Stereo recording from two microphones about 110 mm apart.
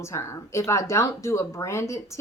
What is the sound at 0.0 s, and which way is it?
A woman's voice, 25° left (ahead or behind).